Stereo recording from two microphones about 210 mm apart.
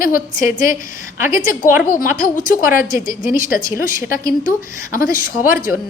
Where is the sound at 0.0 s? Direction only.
40° left (ahead or behind).